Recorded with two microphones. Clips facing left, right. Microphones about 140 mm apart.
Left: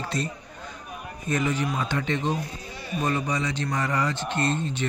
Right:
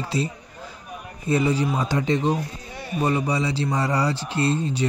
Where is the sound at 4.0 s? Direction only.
10° right (ahead or behind).